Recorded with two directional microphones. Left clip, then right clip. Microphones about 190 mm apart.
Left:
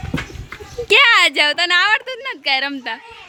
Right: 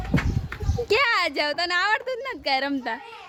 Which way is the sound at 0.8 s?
Centre (ahead or behind).